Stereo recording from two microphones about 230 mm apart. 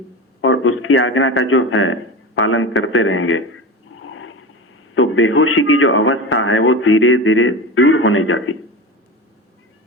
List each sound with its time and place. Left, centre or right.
0.4 s a man's voice: left
2.4 s a sound: left
4.9 s a man's voice: left